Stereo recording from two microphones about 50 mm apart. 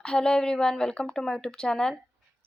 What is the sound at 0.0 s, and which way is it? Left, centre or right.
Speech, centre.